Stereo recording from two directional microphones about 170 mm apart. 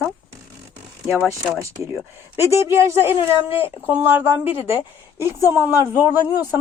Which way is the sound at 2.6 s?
15° right (ahead or behind).